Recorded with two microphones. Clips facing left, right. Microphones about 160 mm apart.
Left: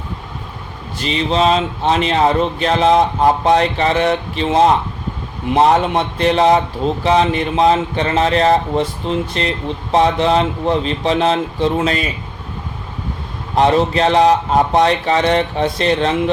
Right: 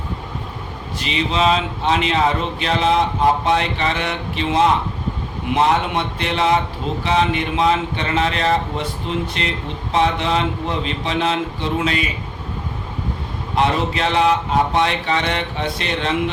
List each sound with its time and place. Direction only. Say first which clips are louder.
1.0 s speech: left 3 dB; 35° left (ahead or behind)
13.6 s speech: left 6 dB; 35° left (ahead or behind)